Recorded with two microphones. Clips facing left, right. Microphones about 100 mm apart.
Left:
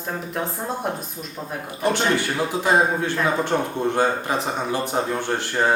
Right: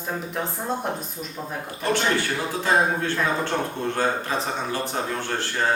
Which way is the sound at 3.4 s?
15° left (ahead or behind).